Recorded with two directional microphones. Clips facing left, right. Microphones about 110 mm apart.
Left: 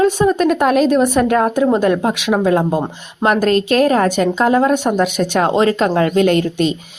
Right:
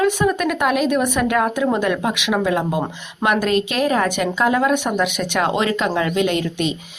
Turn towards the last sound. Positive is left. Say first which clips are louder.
# left 6 dB
turn(degrees=40)  # may be behind; listen again after turning